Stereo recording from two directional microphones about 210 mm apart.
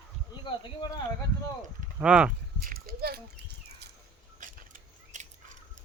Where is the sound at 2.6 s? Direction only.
45° right (ahead or behind).